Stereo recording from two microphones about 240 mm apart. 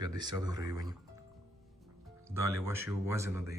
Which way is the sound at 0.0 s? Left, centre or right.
Centre.